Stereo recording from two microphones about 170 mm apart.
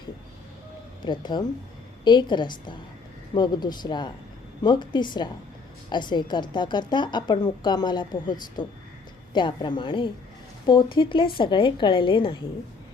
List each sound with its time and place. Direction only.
1.0 s a woman's voice: 25° left (ahead or behind)